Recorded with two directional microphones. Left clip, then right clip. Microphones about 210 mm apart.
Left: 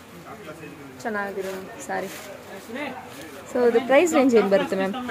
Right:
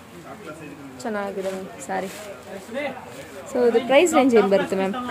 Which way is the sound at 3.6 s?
15° right (ahead or behind).